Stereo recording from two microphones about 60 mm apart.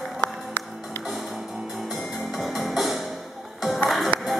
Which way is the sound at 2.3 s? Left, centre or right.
Centre.